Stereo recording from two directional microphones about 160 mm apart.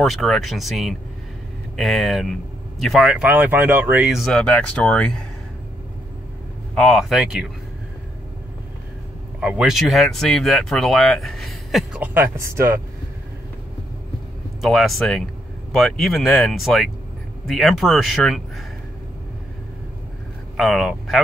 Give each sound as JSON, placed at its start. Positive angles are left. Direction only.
{"t": 0.0, "sound": "speech", "side_deg": 0}
{"t": 6.7, "sound": "speech", "side_deg": 0}
{"t": 9.4, "sound": "speech", "side_deg": -5}
{"t": 12.0, "sound": "speech", "side_deg": -15}
{"t": 14.6, "sound": "speech", "side_deg": 0}
{"t": 20.5, "sound": "speech", "side_deg": 0}